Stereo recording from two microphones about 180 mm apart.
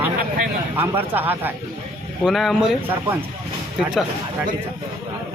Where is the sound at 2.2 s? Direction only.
Centre (ahead or behind).